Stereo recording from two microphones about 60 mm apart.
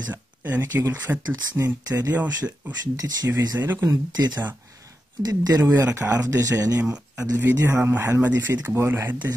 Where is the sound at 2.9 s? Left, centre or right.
Right.